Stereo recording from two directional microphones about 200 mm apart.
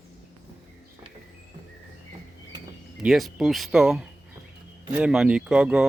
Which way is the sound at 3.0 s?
Centre (ahead or behind).